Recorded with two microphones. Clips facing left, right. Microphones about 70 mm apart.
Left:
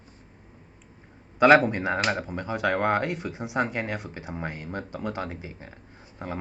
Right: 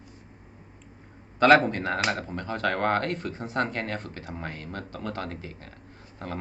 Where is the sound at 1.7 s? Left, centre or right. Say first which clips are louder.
Left 1 dB; centre.